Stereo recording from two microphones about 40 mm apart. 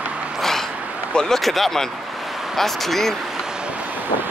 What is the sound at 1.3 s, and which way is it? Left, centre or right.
Speech, centre.